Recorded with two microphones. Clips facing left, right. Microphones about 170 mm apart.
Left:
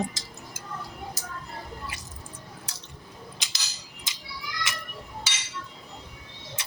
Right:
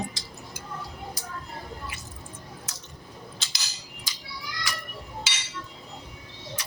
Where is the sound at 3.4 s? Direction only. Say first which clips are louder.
Right 1 dB; 15° left (ahead or behind).